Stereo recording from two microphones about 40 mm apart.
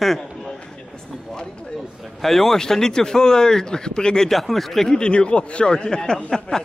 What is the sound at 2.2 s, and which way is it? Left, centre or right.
Speech, centre.